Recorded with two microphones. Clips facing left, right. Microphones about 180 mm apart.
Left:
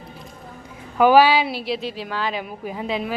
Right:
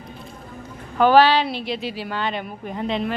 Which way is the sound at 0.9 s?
10° left (ahead or behind).